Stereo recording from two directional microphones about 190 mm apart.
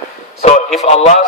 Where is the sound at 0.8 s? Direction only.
35° left (ahead or behind).